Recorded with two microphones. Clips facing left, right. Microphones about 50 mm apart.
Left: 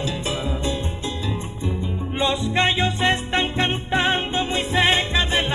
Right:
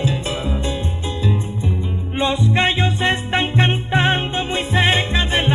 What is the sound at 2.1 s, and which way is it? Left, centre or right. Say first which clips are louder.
Music: right 3 dB; centre.